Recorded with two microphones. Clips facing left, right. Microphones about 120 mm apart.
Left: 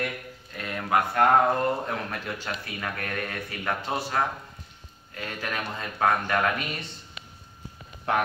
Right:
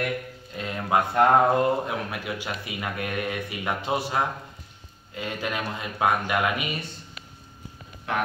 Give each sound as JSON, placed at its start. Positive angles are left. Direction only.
{"t": 0.6, "sound": "speech", "side_deg": -20}